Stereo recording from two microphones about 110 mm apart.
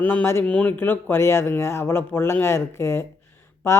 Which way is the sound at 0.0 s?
15° left (ahead or behind).